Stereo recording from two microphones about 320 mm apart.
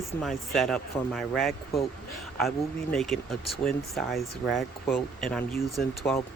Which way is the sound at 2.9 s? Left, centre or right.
Centre.